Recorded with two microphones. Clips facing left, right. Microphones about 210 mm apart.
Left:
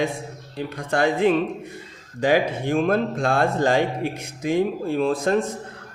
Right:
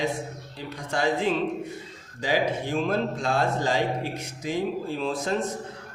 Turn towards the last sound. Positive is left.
turn(degrees=55)  # may be behind; listen again after turning